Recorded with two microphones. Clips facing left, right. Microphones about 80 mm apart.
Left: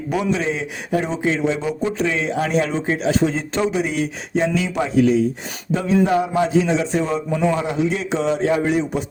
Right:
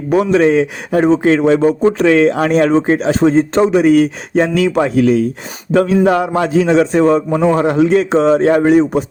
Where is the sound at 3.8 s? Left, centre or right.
Right.